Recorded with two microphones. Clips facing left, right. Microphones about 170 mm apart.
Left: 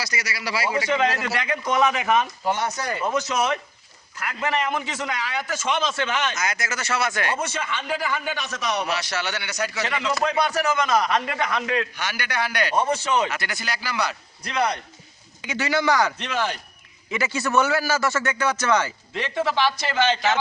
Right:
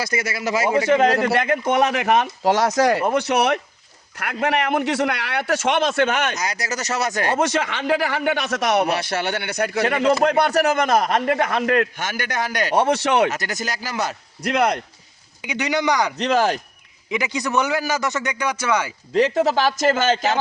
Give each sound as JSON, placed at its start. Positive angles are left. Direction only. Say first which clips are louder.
{"t": 0.0, "sound": "a man's voice", "louder": "right 6 dB", "side_deg": -50}
{"t": 6.3, "sound": "speech", "louder": "right 2 dB", "side_deg": -35}
{"t": 7.3, "sound": "a man's voice", "louder": "right 7 dB", "side_deg": -80}
{"t": 12.7, "sound": "speech", "louder": "right 5 dB", "side_deg": -70}
{"t": 13.3, "sound": "a man's voice", "louder": "right 3 dB", "side_deg": -45}
{"t": 14.4, "sound": "a man's voice", "louder": "right 5 dB", "side_deg": -60}
{"t": 15.4, "sound": "a man's voice", "louder": "right 2 dB", "side_deg": -15}
{"t": 16.1, "sound": "speech", "louder": "right 8 dB", "side_deg": -40}
{"t": 17.1, "sound": "a man's voice", "louder": "right 1 dB", "side_deg": -15}
{"t": 19.1, "sound": "a man's voice", "louder": "right 7 dB", "side_deg": -40}